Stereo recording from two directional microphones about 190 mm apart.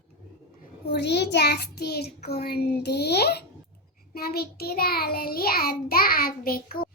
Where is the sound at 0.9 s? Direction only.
60° left (ahead or behind).